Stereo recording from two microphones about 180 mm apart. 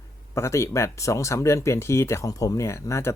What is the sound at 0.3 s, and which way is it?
Speech, 15° left (ahead or behind).